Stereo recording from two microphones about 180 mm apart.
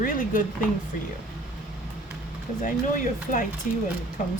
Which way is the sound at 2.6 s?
45° left (ahead or behind).